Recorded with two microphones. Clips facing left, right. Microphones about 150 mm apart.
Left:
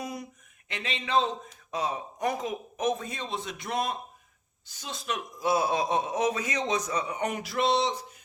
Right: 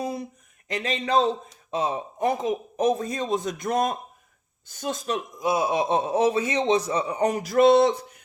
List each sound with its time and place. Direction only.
0.0 s a sound: 30° right (ahead or behind)
0.7 s a man's voice: 40° right (ahead or behind)
5.4 s a man's voice: 20° right (ahead or behind)
5.9 s a man's voice: 30° right (ahead or behind); by 8.2 s 55° right (ahead or behind)